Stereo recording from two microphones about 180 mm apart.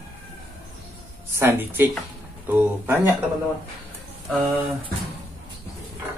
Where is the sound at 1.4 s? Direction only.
10° right (ahead or behind).